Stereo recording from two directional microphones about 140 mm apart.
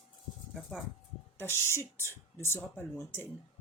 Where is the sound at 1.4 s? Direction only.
15° left (ahead or behind).